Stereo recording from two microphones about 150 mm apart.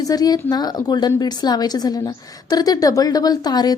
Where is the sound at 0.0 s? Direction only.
25° left (ahead or behind).